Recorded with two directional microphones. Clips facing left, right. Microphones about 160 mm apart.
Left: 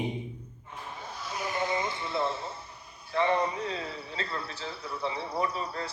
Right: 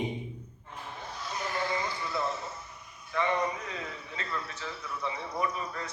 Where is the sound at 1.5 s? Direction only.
20° left (ahead or behind).